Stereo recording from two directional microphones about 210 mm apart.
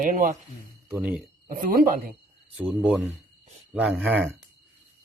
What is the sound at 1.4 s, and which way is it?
Speech, 40° right (ahead or behind).